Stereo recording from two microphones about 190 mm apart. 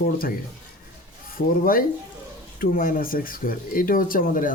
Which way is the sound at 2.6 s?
50° left (ahead or behind).